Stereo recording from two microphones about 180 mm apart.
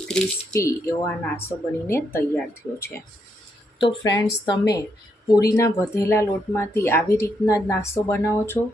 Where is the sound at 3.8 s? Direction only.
25° left (ahead or behind).